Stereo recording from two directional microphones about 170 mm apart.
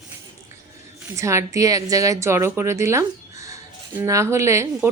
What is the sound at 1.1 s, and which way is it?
Speech, 15° right (ahead or behind).